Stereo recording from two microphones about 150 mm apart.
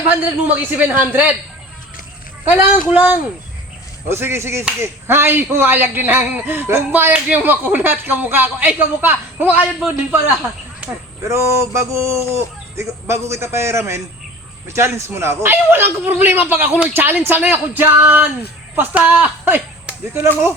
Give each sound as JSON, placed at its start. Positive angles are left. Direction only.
{"t": 0.4, "sound": "a man's voice", "side_deg": -10}
{"t": 2.4, "sound": "a man's voice", "side_deg": -15}